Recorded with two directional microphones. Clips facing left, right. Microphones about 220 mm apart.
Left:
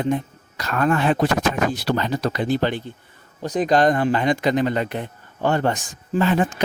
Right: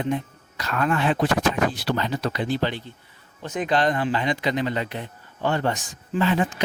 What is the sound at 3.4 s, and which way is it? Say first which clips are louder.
Speech: left 5 dB; 35° left (ahead or behind).